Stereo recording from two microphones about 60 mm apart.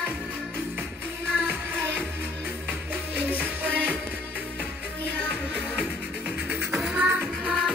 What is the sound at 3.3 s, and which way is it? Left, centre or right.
Music, right.